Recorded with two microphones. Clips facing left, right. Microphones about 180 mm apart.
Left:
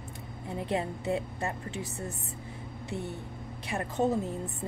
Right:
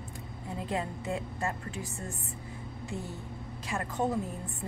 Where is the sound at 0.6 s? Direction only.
25° left (ahead or behind).